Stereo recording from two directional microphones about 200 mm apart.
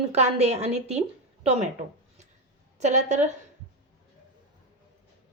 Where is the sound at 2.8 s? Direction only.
35° right (ahead or behind).